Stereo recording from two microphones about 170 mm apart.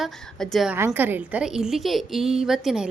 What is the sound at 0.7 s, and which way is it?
A woman's voice, 15° right (ahead or behind).